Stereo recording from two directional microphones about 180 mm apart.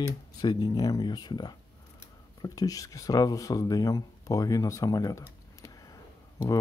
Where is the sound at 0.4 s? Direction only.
20° left (ahead or behind).